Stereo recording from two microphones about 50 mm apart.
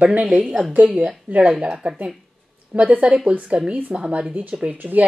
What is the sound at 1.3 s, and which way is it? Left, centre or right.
Speech, right.